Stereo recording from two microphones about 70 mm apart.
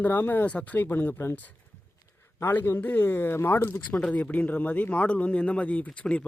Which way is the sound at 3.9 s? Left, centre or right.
Centre.